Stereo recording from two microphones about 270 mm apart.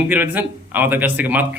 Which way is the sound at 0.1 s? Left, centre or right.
Centre.